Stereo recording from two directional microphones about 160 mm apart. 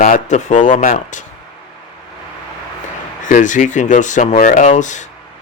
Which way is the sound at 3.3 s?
50° left (ahead or behind).